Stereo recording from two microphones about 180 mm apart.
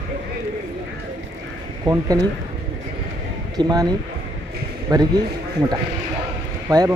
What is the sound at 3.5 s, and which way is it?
Speech, 20° right (ahead or behind).